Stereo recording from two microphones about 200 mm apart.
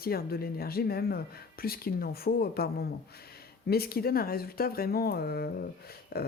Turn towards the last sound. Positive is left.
turn(degrees=50)  # may be behind; listen again after turning